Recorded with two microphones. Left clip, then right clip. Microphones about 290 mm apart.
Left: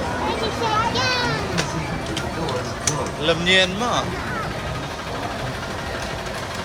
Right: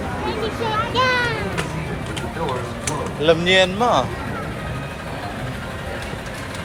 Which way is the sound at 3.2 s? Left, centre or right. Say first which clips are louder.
Right 3 dB; centre.